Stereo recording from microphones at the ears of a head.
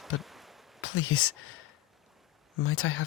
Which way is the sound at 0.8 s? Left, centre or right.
Left.